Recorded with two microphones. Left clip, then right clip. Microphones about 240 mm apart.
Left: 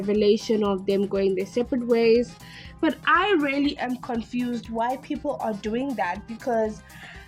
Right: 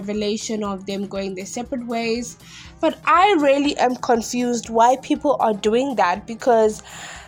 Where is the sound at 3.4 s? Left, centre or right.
Centre.